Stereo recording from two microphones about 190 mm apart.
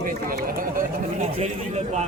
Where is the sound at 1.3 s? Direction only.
35° right (ahead or behind).